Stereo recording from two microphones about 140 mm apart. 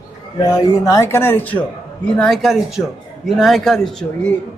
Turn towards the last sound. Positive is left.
turn(degrees=5)  # may be behind; listen again after turning